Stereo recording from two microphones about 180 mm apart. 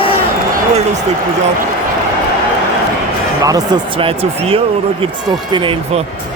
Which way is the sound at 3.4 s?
20° right (ahead or behind).